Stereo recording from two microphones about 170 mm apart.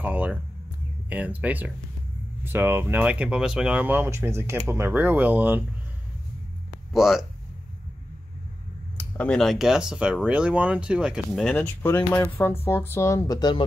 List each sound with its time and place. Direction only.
0.0 s a sound: 10° right (ahead or behind)
1.1 s speech: 10° right (ahead or behind)
6.9 s speech: centre (ahead or behind)
8.9 s speech: 10° left (ahead or behind)
11.5 s speech: 15° left (ahead or behind)